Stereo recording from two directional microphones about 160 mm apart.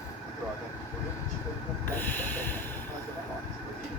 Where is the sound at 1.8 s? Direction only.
10° left (ahead or behind).